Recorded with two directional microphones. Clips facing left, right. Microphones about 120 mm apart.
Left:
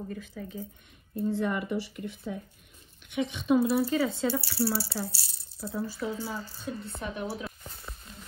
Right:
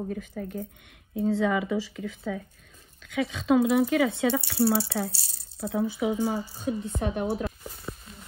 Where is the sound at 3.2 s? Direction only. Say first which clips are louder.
Right 2 dB; 90° right; by 6.1 s 60° right (ahead or behind).